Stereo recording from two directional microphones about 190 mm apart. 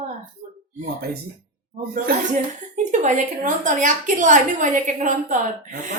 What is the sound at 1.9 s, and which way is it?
Speech, 40° right (ahead or behind).